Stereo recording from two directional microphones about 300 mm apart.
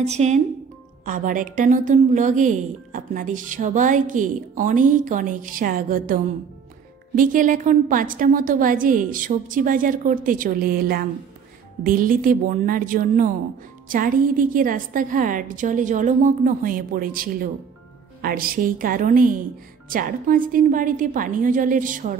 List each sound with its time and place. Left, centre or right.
0.0 s a woman's voice: right